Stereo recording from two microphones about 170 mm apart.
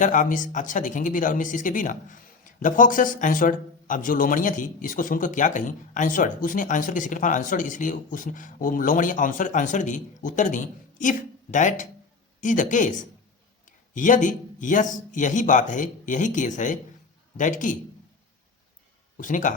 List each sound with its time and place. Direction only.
0.0 s speech: 50° left (ahead or behind)
19.1 s speech: 50° left (ahead or behind)